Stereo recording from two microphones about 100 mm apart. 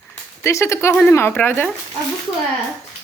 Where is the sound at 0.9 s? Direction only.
5° left (ahead or behind).